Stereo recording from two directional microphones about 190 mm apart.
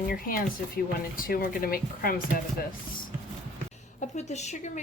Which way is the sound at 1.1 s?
50° left (ahead or behind).